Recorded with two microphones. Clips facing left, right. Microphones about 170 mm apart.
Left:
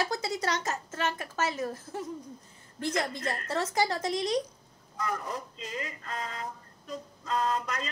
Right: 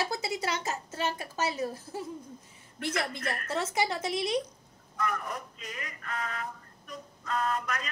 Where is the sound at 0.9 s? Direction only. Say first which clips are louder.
Left 1 dB; 15° right (ahead or behind).